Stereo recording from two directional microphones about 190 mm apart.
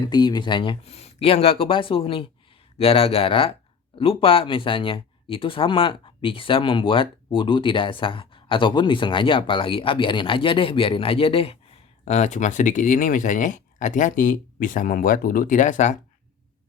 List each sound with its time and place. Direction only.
0.0 s speech: 20° left (ahead or behind); by 16.0 s 40° left (ahead or behind)